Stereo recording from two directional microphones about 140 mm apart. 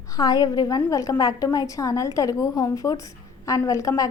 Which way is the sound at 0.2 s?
25° left (ahead or behind).